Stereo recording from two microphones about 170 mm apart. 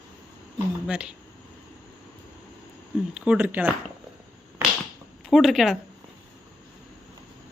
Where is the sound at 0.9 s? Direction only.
5° right (ahead or behind).